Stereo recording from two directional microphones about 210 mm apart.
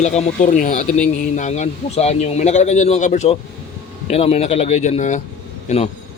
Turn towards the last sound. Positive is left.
turn(degrees=30)  # may be behind; listen again after turning